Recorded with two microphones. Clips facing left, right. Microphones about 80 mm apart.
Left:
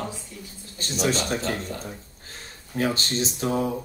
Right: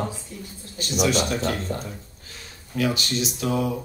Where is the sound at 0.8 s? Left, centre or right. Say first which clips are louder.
Right 2 dB; left.